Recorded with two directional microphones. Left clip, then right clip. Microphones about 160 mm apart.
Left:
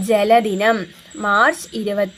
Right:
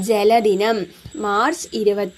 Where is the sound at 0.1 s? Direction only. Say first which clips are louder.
Left 1 dB; 35° right (ahead or behind).